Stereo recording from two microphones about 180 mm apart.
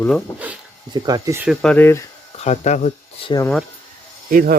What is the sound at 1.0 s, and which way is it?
Speech, 20° right (ahead or behind).